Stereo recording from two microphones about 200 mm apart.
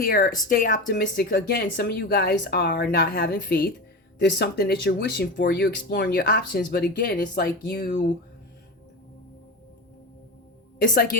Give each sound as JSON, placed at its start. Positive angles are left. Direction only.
{"t": 0.0, "sound": "speech", "side_deg": 45}
{"t": 6.0, "sound": "speech", "side_deg": 45}
{"t": 10.8, "sound": "a woman's voice", "side_deg": 45}